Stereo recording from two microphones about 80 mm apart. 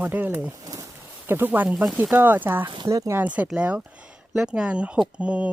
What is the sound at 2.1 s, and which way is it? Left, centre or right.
Speech, right.